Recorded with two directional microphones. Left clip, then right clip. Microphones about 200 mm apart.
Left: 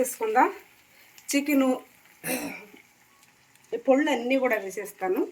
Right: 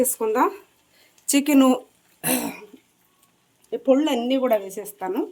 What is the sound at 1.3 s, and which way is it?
Speech, 60° right (ahead or behind).